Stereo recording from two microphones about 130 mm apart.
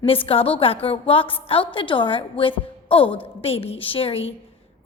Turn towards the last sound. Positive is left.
turn(degrees=45)  # may be behind; listen again after turning